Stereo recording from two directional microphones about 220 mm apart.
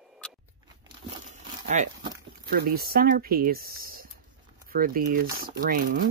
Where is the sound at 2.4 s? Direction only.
45° right (ahead or behind).